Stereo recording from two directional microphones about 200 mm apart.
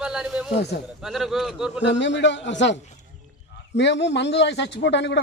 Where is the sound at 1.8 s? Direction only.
60° left (ahead or behind).